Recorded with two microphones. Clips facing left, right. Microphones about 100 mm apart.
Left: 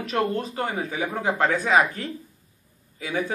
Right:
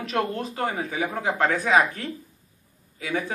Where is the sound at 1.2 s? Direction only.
10° left (ahead or behind).